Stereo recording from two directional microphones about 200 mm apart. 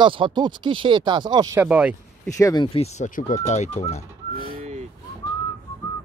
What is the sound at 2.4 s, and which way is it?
Speech, 15° left (ahead or behind).